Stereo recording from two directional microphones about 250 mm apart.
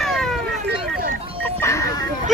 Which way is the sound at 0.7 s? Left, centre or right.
Right.